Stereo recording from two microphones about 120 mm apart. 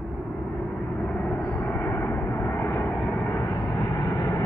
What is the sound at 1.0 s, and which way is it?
Vehicle, 10° left (ahead or behind).